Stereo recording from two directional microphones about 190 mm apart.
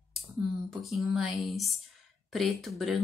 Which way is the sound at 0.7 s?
Centre (ahead or behind).